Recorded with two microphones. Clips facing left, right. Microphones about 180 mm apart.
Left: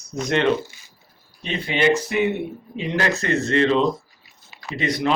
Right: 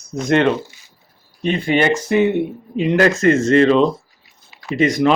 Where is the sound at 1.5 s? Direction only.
50° right (ahead or behind).